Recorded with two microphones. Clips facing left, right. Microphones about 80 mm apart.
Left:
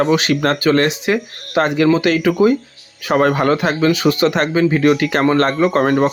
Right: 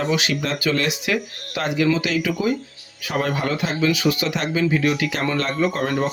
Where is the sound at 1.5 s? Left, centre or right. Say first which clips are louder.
Left 7 dB; left.